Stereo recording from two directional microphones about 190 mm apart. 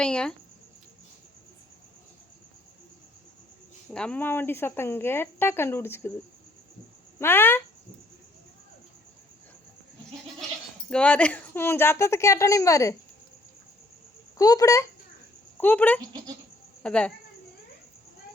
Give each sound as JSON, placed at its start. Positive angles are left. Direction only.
{"t": 0.0, "sound": "speech", "side_deg": 5}
{"t": 3.9, "sound": "speech", "side_deg": 5}
{"t": 7.2, "sound": "speech", "side_deg": 10}
{"t": 10.8, "sound": "speech", "side_deg": 5}
{"t": 14.3, "sound": "speech", "side_deg": 15}
{"t": 16.0, "sound": "speech", "side_deg": -20}
{"t": 16.8, "sound": "speech", "side_deg": 5}